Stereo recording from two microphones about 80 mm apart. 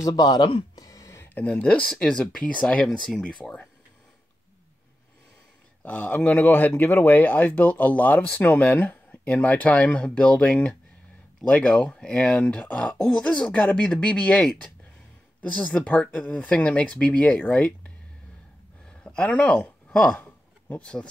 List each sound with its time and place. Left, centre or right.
0.0 s speech: left
0.7 s a sound: left
1.3 s speech: centre
5.9 s speech: centre